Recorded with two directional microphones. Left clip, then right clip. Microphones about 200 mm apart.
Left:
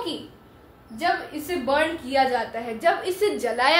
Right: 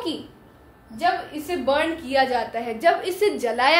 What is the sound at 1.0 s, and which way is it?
A woman's voice, 30° right (ahead or behind).